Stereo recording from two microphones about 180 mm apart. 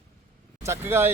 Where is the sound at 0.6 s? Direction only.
15° right (ahead or behind).